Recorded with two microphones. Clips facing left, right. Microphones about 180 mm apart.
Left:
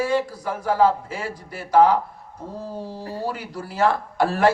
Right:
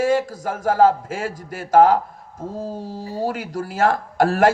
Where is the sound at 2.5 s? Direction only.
90° right.